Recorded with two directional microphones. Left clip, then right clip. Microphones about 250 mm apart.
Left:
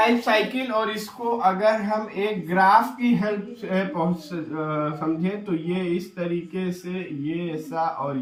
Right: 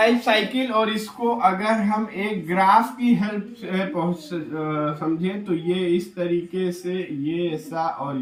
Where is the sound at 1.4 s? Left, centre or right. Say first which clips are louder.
Left 1 dB; centre.